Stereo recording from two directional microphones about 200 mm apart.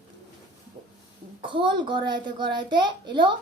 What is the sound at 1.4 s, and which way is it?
A child's voice, 25° right (ahead or behind).